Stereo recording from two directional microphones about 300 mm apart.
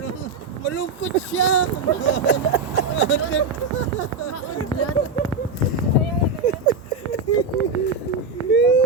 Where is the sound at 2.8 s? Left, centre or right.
Left.